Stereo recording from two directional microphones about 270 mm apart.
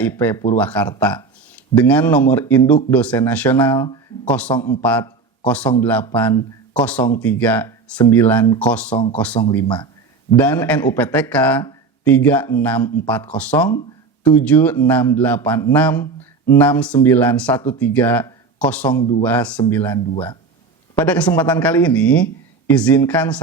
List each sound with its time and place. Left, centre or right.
0.0 s speech: centre
3.8 s speech: centre
4.8 s speech: centre
21.0 s speech: centre